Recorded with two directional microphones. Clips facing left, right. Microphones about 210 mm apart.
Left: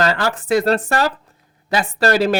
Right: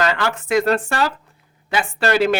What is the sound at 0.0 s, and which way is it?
Speech, 35° left (ahead or behind).